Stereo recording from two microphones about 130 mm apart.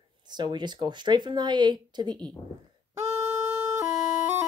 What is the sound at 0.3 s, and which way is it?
Speech, 35° right (ahead or behind).